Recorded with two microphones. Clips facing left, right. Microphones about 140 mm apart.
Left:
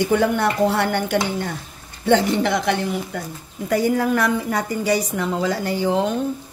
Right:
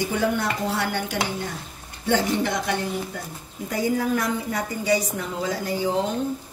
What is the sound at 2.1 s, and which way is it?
A woman's voice, 70° left (ahead or behind).